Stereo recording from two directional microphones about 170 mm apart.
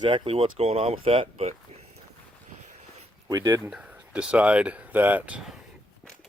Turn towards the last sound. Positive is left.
turn(degrees=-5)  # may be behind; listen again after turning